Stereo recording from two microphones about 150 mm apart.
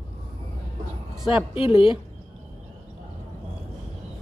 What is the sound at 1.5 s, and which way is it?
Speech, 35° left (ahead or behind).